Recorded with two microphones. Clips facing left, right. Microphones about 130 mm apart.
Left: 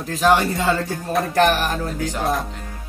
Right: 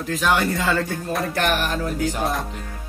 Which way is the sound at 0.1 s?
35° left (ahead or behind).